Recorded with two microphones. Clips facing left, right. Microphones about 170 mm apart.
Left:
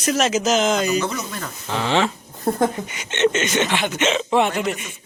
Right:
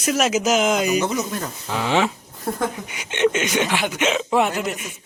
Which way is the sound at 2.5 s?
25° left (ahead or behind).